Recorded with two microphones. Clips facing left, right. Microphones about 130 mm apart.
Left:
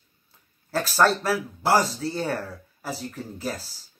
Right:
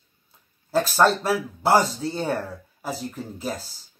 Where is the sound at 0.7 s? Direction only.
20° right (ahead or behind).